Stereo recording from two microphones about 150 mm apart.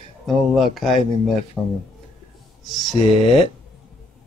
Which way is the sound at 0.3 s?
Centre (ahead or behind).